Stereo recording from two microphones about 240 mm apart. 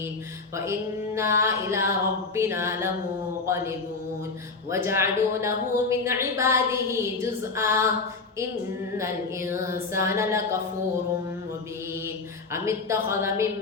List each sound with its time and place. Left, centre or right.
0.5 s a woman's voice: centre
9.0 s a woman's voice: centre
12.5 s a woman's voice: centre